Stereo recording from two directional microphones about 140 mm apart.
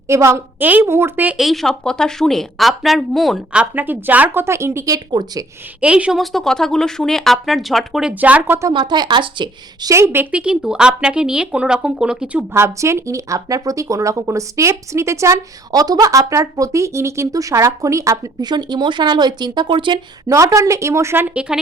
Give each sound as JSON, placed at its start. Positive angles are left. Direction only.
{"t": 0.1, "sound": "a woman's voice", "side_deg": -20}
{"t": 1.4, "sound": "a woman's voice", "side_deg": 0}
{"t": 5.8, "sound": "a woman's voice", "side_deg": -10}
{"t": 8.1, "sound": "a woman's voice", "side_deg": -10}
{"t": 8.7, "sound": "a woman's voice", "side_deg": -30}
{"t": 9.9, "sound": "speech", "side_deg": -20}
{"t": 20.2, "sound": "speech", "side_deg": -20}